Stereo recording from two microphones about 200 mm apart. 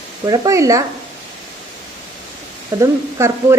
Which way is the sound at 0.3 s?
15° right (ahead or behind).